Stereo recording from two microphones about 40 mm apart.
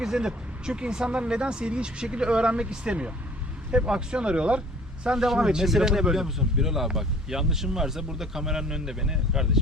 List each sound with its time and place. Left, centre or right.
0.0 s speech: centre
5.0 s speech: centre